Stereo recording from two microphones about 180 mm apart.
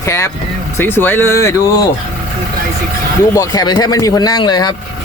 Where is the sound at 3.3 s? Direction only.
20° left (ahead or behind).